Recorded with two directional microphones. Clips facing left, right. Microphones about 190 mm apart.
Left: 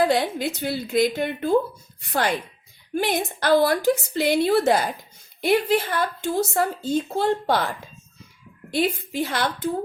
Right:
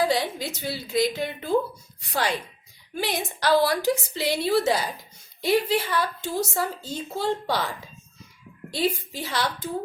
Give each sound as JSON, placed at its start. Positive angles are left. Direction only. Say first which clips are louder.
{"t": 0.0, "sound": "a woman's voice", "louder": "left 3 dB", "side_deg": 55}
{"t": 8.7, "sound": "speech", "louder": "left 3 dB", "side_deg": 55}